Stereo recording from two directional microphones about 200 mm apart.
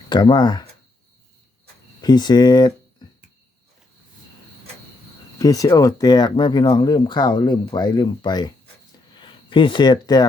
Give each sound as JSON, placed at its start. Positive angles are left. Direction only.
{"t": 0.1, "sound": "speech", "side_deg": 20}
{"t": 2.0, "sound": "speech", "side_deg": 20}
{"t": 5.4, "sound": "speech", "side_deg": 15}